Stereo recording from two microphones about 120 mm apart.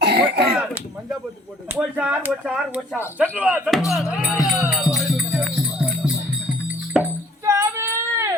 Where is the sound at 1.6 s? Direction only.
10° right (ahead or behind).